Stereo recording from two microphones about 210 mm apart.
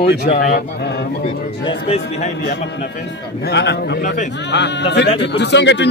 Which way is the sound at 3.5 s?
55° left (ahead or behind).